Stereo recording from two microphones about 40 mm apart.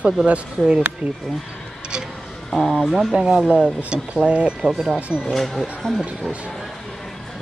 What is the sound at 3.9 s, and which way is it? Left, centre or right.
Speech, right.